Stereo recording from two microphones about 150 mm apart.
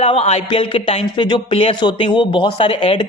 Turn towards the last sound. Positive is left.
turn(degrees=40)  # may be behind; listen again after turning